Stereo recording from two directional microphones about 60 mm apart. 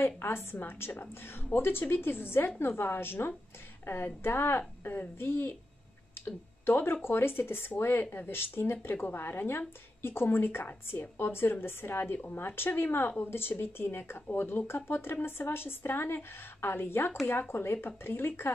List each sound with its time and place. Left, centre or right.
0.0 s a woman's voice: left